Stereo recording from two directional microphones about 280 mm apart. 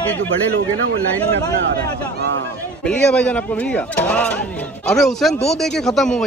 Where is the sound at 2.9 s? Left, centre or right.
Centre.